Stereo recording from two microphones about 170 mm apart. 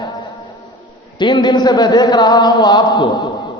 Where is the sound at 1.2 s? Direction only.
25° left (ahead or behind).